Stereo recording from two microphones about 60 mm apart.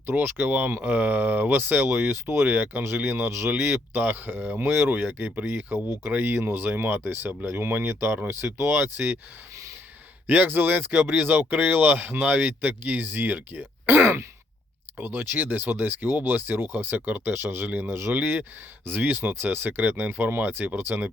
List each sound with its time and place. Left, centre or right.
0.0 s speech: right
1.9 s speech: right
10.2 s speech: right